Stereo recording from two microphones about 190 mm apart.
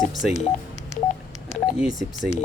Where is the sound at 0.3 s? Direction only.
15° left (ahead or behind).